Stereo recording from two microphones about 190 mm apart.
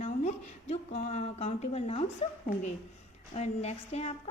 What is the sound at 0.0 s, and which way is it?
Speech, 35° left (ahead or behind).